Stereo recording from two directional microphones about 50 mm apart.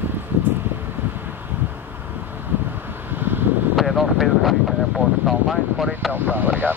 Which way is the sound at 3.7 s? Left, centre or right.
Centre.